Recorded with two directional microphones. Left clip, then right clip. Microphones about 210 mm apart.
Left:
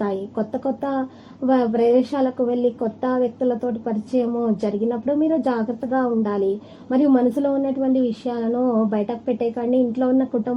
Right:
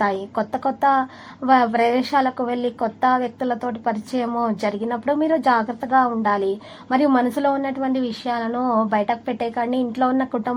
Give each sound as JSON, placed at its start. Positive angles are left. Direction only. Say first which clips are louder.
{"t": 0.0, "sound": "a woman's voice", "louder": "right 3 dB", "side_deg": -20}